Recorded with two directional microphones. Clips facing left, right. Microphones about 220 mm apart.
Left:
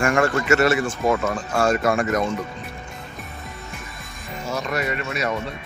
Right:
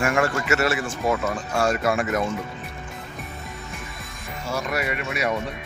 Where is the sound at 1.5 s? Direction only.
50° left (ahead or behind).